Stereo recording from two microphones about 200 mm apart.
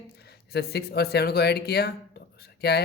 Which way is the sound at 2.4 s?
55° left (ahead or behind).